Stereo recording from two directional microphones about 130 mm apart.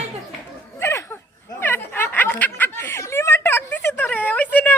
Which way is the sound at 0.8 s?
20° left (ahead or behind).